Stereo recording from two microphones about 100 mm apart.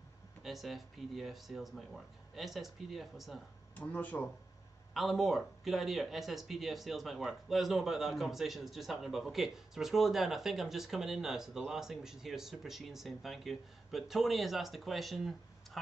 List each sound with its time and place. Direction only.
0.4 s speech: centre (ahead or behind)
3.7 s speech: 15° left (ahead or behind)
4.9 s speech: centre (ahead or behind)